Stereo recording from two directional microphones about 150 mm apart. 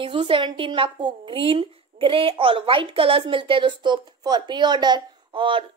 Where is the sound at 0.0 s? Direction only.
35° right (ahead or behind).